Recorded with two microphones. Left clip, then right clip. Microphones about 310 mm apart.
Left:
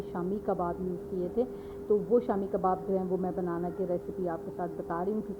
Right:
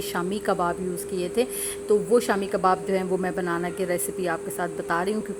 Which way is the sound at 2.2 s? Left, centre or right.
Right.